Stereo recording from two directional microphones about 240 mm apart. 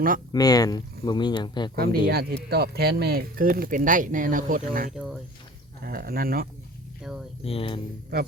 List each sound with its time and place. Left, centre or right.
0.3 s speech: centre
1.7 s speech: right
7.0 s speech: centre
7.4 s speech: left